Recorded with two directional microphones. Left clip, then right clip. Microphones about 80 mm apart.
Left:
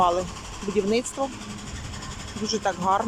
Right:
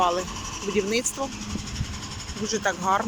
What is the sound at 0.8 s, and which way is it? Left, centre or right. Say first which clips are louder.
Speech: left 2 dB; left.